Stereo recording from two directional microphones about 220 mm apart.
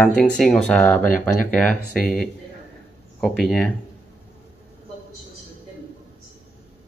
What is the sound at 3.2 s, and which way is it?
Speech, 5° left (ahead or behind).